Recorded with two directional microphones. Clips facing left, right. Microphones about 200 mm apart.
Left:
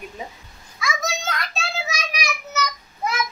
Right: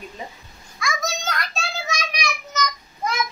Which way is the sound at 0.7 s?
Centre (ahead or behind).